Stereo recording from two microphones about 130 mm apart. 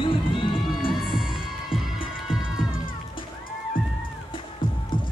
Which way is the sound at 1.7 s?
40° left (ahead or behind).